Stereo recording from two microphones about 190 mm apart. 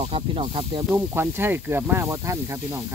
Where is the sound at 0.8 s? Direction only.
10° right (ahead or behind).